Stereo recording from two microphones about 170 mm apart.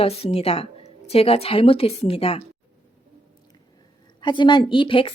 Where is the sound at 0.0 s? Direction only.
35° left (ahead or behind).